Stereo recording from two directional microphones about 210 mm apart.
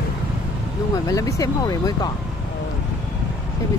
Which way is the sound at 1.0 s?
15° left (ahead or behind).